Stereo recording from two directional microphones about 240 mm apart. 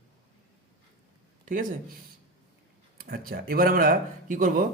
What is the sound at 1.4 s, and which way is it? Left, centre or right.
Speech, right.